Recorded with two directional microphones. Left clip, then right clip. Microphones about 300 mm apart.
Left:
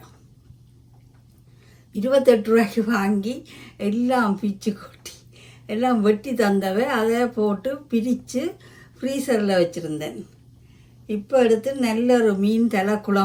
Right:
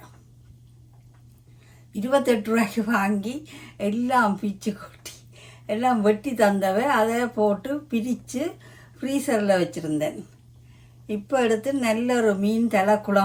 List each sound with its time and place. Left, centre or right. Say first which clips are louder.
1.9 s a woman's voice: left 5 dB; centre